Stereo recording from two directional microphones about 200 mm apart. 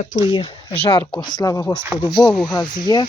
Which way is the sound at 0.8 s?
25° left (ahead or behind).